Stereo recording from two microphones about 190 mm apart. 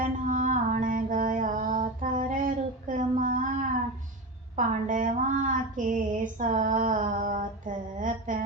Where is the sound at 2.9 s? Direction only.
40° right (ahead or behind).